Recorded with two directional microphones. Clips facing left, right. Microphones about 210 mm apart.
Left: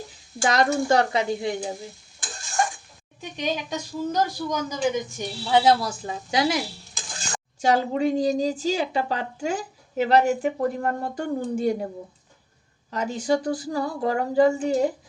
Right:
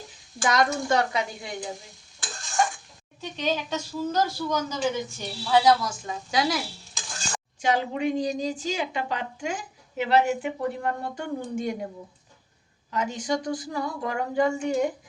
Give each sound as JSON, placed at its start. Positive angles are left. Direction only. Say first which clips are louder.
{"t": 0.4, "sound": "a woman's voice", "louder": "left 3 dB", "side_deg": 30}
{"t": 3.2, "sound": "speech", "louder": "even", "side_deg": 15}
{"t": 5.8, "sound": "a woman's voice", "louder": "left 2 dB", "side_deg": 30}
{"t": 7.6, "sound": "a woman's voice", "louder": "left 4 dB", "side_deg": 40}
{"t": 12.9, "sound": "a woman's voice", "louder": "left 4 dB", "side_deg": 35}